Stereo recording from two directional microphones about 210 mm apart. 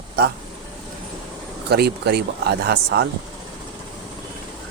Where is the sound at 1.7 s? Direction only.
50° right (ahead or behind).